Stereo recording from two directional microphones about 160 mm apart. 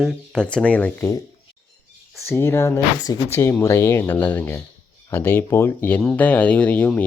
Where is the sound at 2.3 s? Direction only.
15° left (ahead or behind).